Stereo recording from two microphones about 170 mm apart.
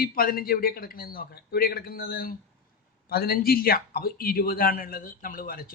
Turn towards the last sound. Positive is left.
turn(degrees=55)  # may be behind; listen again after turning